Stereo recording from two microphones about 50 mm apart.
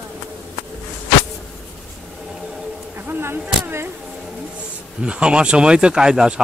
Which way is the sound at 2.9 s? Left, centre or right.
Right.